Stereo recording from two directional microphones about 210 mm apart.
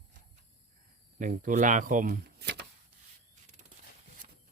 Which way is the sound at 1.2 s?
40° right (ahead or behind).